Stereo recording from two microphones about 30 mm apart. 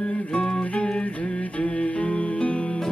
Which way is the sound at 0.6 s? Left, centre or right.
Left.